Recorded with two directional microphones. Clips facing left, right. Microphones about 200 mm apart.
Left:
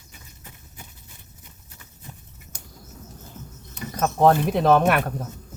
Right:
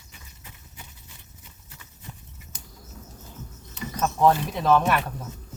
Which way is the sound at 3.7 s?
55° left (ahead or behind).